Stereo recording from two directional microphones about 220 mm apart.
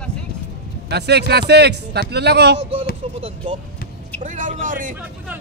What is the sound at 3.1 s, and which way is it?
A woman's voice, 25° right (ahead or behind).